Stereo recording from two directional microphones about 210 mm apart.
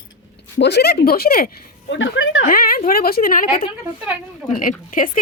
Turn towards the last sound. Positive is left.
turn(degrees=40)  # may be behind; listen again after turning